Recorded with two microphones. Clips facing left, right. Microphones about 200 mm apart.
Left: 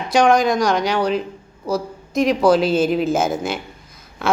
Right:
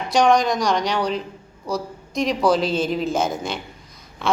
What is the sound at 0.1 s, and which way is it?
A woman's voice, centre (ahead or behind).